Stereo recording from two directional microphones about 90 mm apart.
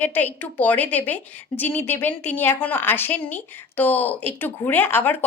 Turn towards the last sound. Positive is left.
turn(degrees=20)  # may be behind; listen again after turning